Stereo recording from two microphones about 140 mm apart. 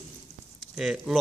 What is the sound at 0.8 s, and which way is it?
Speech, 5° right (ahead or behind).